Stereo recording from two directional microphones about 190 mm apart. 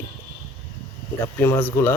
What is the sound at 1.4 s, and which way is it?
Speech, 10° left (ahead or behind).